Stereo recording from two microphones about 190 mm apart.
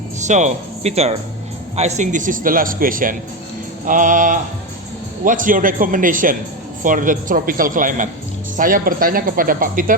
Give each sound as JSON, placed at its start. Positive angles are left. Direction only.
{"t": 0.2, "sound": "a man's voice", "side_deg": -40}